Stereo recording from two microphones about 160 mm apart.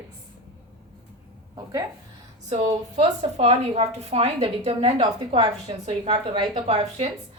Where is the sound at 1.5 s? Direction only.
20° right (ahead or behind).